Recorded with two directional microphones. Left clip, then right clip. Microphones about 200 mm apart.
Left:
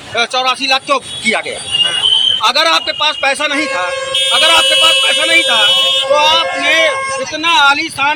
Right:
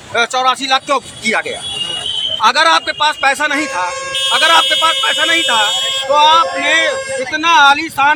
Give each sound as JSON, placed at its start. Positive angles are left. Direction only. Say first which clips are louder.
{"t": 0.2, "sound": "a man's voice", "louder": "even", "side_deg": -15}
{"t": 2.4, "sound": "a man's voice", "louder": "right 1 dB", "side_deg": -15}